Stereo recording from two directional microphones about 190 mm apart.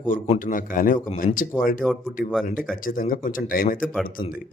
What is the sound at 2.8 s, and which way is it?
A man's voice, 45° left (ahead or behind).